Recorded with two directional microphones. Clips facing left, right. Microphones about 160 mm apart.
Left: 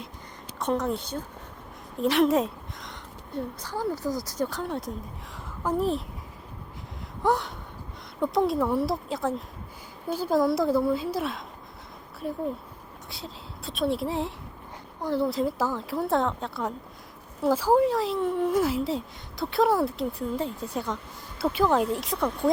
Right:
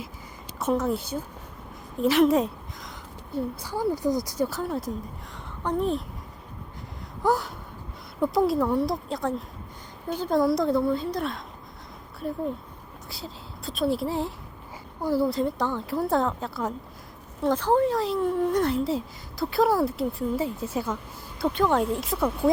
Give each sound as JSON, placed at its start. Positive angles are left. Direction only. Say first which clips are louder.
{"t": 0.6, "sound": "a woman's voice", "louder": "right 2 dB", "side_deg": -5}
{"t": 7.2, "sound": "a woman's voice", "louder": "right 1 dB", "side_deg": 0}